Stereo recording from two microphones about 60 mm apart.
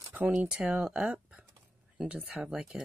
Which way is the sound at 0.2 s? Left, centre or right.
Right.